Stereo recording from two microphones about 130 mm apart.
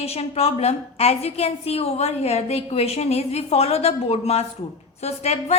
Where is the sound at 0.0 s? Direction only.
50° left (ahead or behind).